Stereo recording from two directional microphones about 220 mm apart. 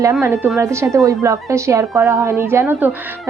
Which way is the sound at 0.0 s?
15° right (ahead or behind).